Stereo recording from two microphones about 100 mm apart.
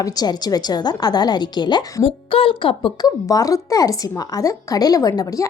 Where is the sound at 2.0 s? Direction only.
70° left (ahead or behind).